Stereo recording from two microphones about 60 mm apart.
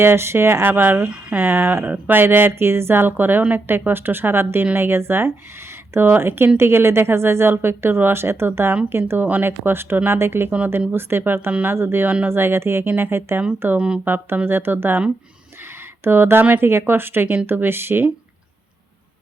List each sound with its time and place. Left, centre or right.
0.0 s speech: right
13.7 s speech: centre
14.0 s speech: right
16.0 s speech: right